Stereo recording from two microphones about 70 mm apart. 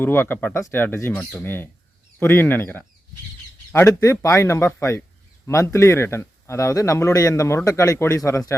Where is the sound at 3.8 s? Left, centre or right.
Left.